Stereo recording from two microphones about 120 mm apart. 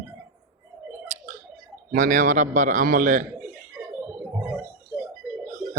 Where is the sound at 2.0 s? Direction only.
90° right.